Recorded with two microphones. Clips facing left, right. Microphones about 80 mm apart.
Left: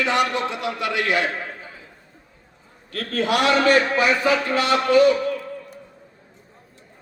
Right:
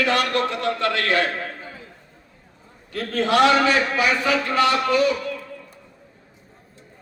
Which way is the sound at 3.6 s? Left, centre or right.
Left.